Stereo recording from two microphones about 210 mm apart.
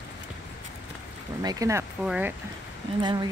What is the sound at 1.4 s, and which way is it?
Speech, 15° right (ahead or behind).